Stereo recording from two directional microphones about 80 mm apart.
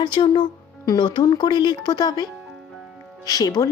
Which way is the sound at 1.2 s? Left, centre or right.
Left.